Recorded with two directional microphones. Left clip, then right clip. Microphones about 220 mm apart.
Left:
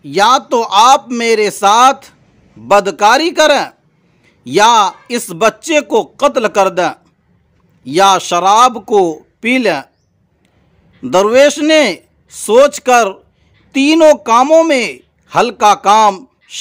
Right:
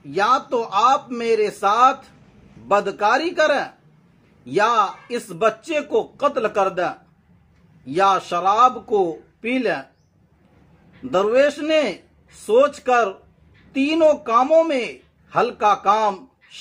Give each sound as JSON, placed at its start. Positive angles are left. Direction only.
{"t": 0.0, "sound": "speech", "side_deg": 50}
{"t": 11.1, "sound": "speech", "side_deg": 50}